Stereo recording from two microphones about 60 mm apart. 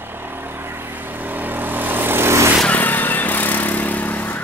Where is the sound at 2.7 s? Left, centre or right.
Left.